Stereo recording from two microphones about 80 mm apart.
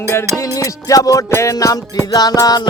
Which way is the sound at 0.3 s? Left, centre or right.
Left.